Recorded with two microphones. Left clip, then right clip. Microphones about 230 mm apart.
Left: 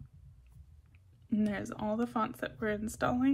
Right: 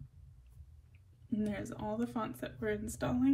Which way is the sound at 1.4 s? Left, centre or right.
Left.